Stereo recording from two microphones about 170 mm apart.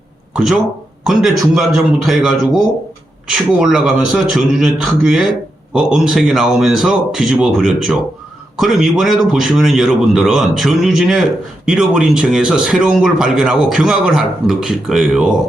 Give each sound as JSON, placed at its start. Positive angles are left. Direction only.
{"t": 0.3, "sound": "speech", "side_deg": -5}